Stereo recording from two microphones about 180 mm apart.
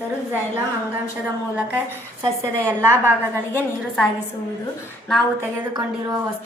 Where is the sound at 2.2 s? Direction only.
15° right (ahead or behind).